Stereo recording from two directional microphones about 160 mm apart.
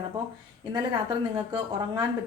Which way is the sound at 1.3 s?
25° right (ahead or behind).